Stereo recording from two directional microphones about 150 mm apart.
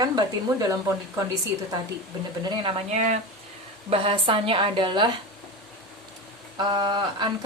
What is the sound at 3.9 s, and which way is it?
Speech, 35° right (ahead or behind).